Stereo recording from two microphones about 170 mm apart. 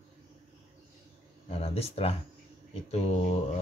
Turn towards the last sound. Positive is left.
turn(degrees=40)  # may be behind; listen again after turning